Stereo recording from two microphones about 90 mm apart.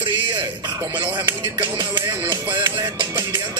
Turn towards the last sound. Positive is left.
turn(degrees=-55)  # may be behind; listen again after turning